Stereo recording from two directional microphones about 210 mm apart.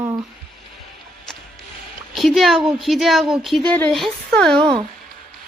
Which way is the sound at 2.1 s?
Centre (ahead or behind).